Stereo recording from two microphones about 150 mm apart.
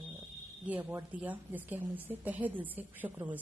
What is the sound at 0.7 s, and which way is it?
A woman's voice, 10° right (ahead or behind).